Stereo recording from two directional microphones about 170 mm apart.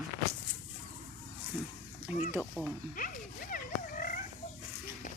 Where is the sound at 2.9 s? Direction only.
55° left (ahead or behind).